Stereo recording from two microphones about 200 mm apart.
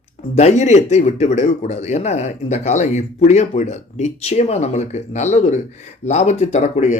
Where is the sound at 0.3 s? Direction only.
35° left (ahead or behind).